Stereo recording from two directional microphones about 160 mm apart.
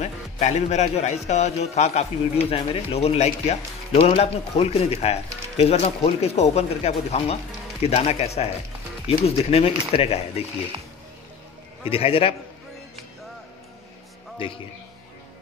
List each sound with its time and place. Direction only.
0.0 s speech: 45° left (ahead or behind)
11.8 s speech: 35° left (ahead or behind)